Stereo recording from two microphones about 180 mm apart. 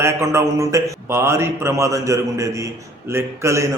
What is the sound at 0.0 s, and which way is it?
Speech, 15° right (ahead or behind).